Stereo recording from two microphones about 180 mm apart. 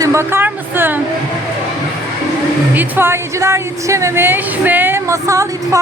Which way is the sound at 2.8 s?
10° right (ahead or behind).